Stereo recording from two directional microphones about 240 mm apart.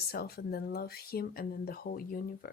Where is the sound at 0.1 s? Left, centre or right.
Left.